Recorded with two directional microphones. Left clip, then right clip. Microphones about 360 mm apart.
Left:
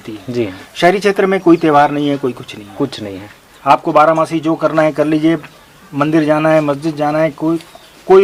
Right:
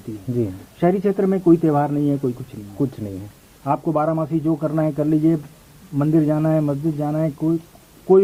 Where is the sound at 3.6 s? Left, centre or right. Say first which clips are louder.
Left 11 dB; centre.